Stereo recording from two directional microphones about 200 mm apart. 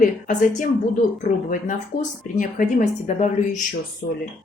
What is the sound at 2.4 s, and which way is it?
Speech, 40° left (ahead or behind).